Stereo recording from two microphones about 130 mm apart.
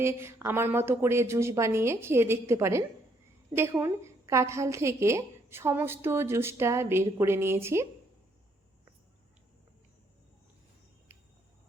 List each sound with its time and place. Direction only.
0.0 s a woman's voice: 20° right (ahead or behind)